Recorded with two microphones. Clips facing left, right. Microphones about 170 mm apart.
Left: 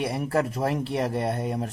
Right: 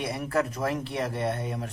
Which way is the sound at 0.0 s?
35° left (ahead or behind).